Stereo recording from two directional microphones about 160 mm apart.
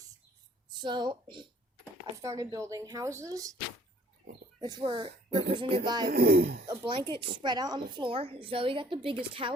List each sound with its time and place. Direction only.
0.7 s speech: 30° right (ahead or behind)
4.6 s speech: 30° right (ahead or behind)
6.1 s speech: 80° right
6.7 s a woman's voice: 30° right (ahead or behind)